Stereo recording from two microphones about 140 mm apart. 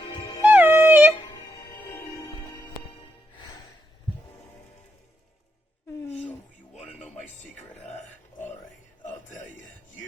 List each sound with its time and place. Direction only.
0.4 s music: 15° right (ahead or behind)
1.9 s music: 25° left (ahead or behind)
9.0 s music: 60° left (ahead or behind)